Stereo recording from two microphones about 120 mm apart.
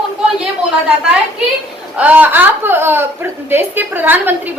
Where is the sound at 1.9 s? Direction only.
10° right (ahead or behind).